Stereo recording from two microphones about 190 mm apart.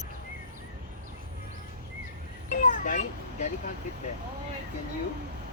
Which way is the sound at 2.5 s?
45° left (ahead or behind).